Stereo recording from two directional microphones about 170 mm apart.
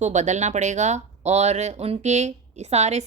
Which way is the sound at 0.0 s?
45° right (ahead or behind).